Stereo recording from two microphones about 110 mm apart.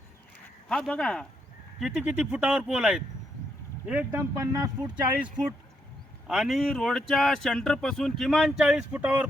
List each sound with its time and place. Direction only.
0.7 s speech: 5° left (ahead or behind)
1.8 s speech: 10° right (ahead or behind)
4.2 s speech: 30° right (ahead or behind)
6.2 s speech: centre (ahead or behind)
9.0 s speech: 15° right (ahead or behind)